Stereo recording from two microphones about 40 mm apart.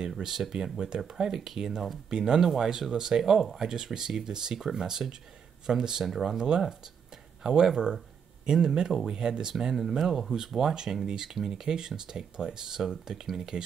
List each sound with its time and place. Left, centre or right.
0.2 s speech: centre
7.4 s speech: centre